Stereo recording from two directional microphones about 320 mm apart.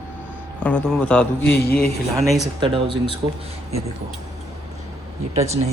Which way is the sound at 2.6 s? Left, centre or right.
Centre.